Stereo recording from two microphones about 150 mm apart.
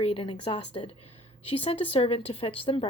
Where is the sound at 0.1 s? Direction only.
40° left (ahead or behind).